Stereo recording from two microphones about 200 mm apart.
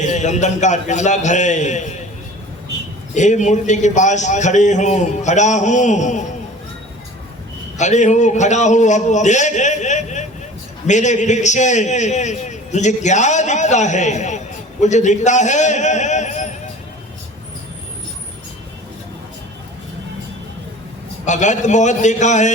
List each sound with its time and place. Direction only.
0.0 s a man's voice: 35° left (ahead or behind)
3.2 s a man's voice: 35° left (ahead or behind)
7.8 s a man's voice: 35° left (ahead or behind)
21.2 s a man's voice: 35° left (ahead or behind)